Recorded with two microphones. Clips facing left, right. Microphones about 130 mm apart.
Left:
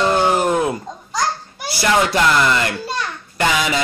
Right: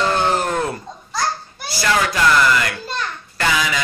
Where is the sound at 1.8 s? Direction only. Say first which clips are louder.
Left 2 dB; 25° left (ahead or behind).